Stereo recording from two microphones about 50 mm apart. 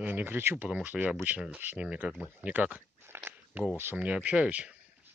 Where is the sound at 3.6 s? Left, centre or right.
Right.